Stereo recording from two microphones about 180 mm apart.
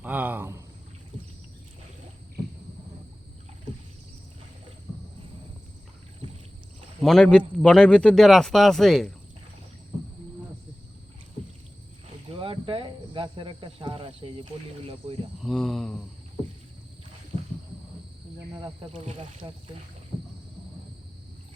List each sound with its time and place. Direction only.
0.0 s a sound: 10° right (ahead or behind)
7.0 s a man's voice: centre (ahead or behind)
12.4 s speech: 30° right (ahead or behind)
15.4 s a man's voice: centre (ahead or behind)
18.9 s speech: 30° right (ahead or behind)